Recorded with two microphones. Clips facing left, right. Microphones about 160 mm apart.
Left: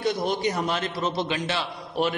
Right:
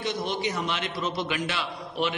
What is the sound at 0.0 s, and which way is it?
A man's voice, 40° left (ahead or behind).